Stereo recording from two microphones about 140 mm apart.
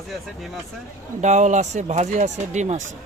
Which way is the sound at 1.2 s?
60° right (ahead or behind).